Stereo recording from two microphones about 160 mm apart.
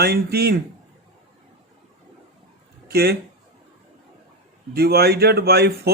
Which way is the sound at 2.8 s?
80° right.